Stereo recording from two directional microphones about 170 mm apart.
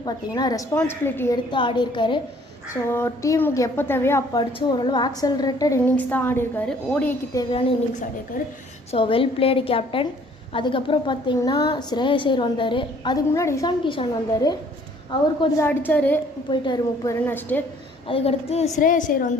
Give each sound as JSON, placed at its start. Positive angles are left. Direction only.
{"t": 0.0, "sound": "a woman's voice", "side_deg": 25}
{"t": 0.7, "sound": "a woman's voice", "side_deg": 15}
{"t": 1.5, "sound": "a woman's voice", "side_deg": 30}
{"t": 2.9, "sound": "a woman's voice", "side_deg": 15}
{"t": 5.8, "sound": "a woman's voice", "side_deg": 10}
{"t": 7.3, "sound": "a woman's voice", "side_deg": 20}
{"t": 8.9, "sound": "a woman's voice", "side_deg": 30}
{"t": 15.4, "sound": "a woman's voice", "side_deg": 15}
{"t": 16.5, "sound": "a woman's voice", "side_deg": 25}
{"t": 18.1, "sound": "a woman's voice", "side_deg": 35}